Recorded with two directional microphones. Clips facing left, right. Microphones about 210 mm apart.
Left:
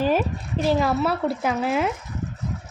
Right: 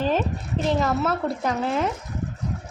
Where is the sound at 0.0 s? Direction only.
10° left (ahead or behind).